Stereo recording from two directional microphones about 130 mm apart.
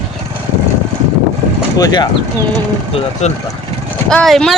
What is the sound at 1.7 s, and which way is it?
Speech, 30° left (ahead or behind).